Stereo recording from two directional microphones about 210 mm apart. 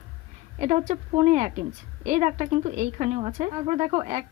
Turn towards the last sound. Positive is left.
turn(degrees=-30)  # may be behind; listen again after turning